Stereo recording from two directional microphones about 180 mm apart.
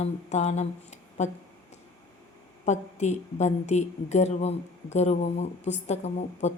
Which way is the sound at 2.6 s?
40° left (ahead or behind).